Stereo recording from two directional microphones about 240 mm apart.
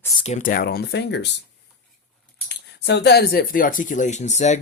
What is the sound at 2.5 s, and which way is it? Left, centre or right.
Speech, left.